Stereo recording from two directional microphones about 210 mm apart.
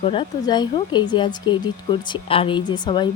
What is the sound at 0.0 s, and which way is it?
Speech, 25° left (ahead or behind).